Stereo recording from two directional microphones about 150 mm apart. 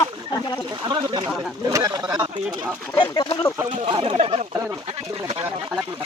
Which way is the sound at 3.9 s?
40° right (ahead or behind).